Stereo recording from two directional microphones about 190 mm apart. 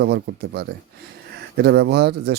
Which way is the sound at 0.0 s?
60° right (ahead or behind).